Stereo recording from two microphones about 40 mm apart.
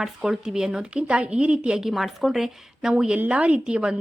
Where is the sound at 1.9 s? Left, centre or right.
Centre.